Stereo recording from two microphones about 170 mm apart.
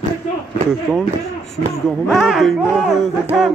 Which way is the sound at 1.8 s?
Centre (ahead or behind).